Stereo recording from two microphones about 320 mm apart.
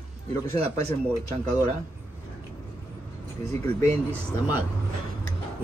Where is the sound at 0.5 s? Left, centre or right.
Centre.